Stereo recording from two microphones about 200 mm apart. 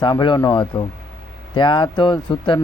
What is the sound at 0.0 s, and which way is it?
Speech, 25° left (ahead or behind).